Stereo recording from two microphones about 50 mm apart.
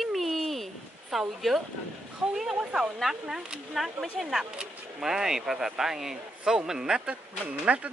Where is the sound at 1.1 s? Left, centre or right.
Centre.